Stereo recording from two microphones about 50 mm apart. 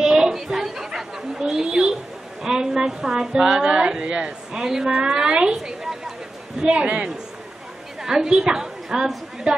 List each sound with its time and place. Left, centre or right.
0.0 s chatter: centre
2.4 s a man's voice: centre